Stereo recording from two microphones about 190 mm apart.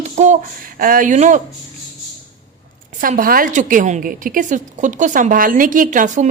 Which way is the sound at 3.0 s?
45° right (ahead or behind).